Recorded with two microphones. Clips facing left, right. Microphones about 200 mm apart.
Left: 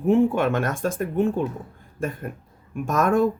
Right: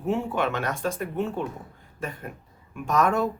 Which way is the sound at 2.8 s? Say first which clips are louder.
Left 3 dB; 45° left (ahead or behind).